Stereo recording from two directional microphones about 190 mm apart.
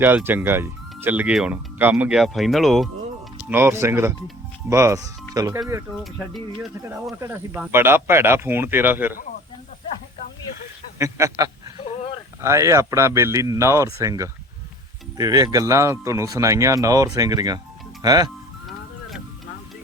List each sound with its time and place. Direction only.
0.0 s speech: 10° right (ahead or behind)
3.5 s speech: 10° right (ahead or behind)
6.1 s speech: centre (ahead or behind)
7.2 s speech: 10° right (ahead or behind)
10.9 s a sound: 15° right (ahead or behind)
12.4 s speech: 15° right (ahead or behind)